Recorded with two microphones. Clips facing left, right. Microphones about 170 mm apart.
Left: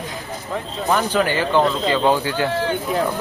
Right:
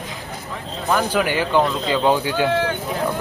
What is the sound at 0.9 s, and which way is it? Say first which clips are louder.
Speech: even; 10° right (ahead or behind).